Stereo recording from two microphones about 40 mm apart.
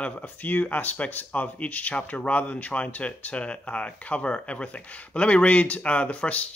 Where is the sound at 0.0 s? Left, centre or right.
Left.